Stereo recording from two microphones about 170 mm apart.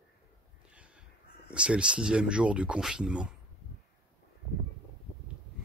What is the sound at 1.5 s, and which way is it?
Speech, 5° right (ahead or behind).